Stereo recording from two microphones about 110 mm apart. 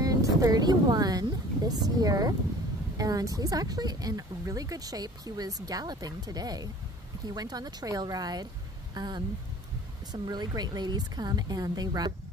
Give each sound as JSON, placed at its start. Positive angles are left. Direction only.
{"t": 0.0, "sound": "speech", "side_deg": -30}